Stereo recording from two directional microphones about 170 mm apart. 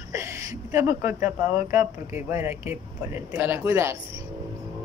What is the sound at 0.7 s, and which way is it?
Speech, 15° right (ahead or behind).